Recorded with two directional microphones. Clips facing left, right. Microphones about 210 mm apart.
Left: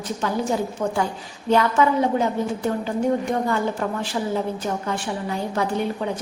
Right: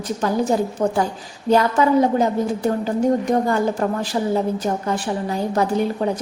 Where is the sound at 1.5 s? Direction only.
35° right (ahead or behind).